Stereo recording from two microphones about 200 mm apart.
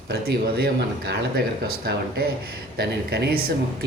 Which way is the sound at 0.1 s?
55° right (ahead or behind).